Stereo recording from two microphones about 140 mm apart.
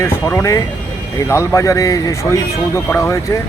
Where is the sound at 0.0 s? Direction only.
15° left (ahead or behind).